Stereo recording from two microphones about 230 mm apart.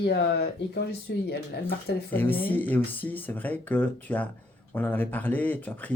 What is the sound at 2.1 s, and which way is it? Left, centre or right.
Speech, centre.